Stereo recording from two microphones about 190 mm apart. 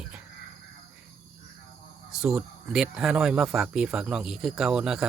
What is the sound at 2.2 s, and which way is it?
Speech, 5° right (ahead or behind).